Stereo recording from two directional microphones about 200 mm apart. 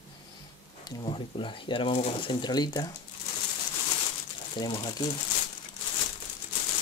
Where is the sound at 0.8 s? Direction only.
20° left (ahead or behind).